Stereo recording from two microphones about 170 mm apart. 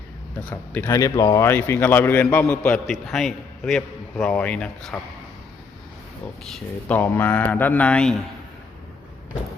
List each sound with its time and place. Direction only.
0.3 s speech: 10° left (ahead or behind)
6.4 s speech: 5° left (ahead or behind)